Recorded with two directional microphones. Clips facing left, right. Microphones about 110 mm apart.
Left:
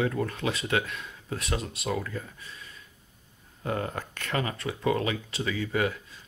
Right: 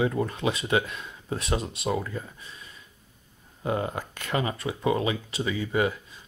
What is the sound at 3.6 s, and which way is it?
Speech, 15° right (ahead or behind).